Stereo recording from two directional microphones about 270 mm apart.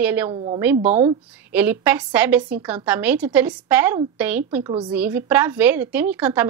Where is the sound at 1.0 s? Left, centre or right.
Centre.